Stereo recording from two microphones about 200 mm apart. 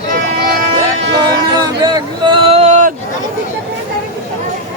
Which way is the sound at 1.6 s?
20° right (ahead or behind).